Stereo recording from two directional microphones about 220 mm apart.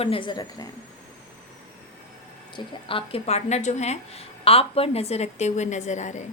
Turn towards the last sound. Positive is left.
turn(degrees=35)  # may be behind; listen again after turning